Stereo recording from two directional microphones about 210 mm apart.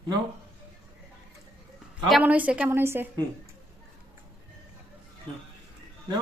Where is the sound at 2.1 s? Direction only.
5° right (ahead or behind).